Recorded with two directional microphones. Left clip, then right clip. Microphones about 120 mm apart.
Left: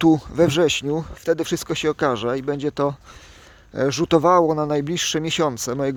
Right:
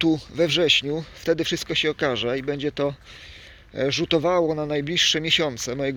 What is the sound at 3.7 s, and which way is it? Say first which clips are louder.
Speech: left 3 dB; 70° left (ahead or behind).